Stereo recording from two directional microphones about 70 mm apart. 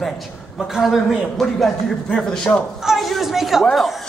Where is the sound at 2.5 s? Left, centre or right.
Centre.